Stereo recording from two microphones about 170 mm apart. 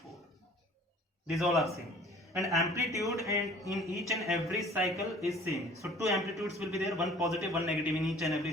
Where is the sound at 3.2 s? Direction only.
20° right (ahead or behind).